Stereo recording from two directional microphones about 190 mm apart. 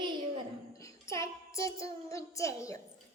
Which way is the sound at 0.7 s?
15° left (ahead or behind).